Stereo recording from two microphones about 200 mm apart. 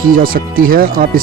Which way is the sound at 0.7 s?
45° right (ahead or behind).